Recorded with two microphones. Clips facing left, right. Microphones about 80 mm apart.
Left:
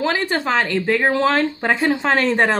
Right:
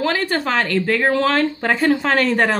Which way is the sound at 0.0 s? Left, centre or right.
Left.